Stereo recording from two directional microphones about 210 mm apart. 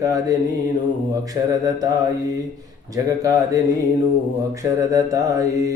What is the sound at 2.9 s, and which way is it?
Speech, 15° right (ahead or behind).